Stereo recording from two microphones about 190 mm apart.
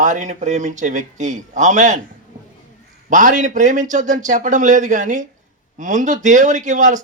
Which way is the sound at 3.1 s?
40° right (ahead or behind).